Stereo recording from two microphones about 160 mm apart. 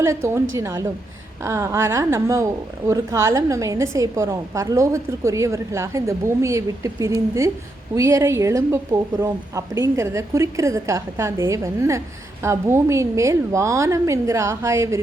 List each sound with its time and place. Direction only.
0.0 s a woman's voice: 15° right (ahead or behind)